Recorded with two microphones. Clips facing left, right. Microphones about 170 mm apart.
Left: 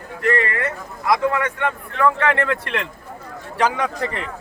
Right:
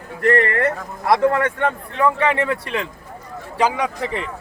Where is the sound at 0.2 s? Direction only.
50° right (ahead or behind).